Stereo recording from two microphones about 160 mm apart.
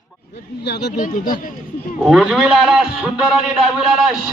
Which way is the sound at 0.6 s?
90° left.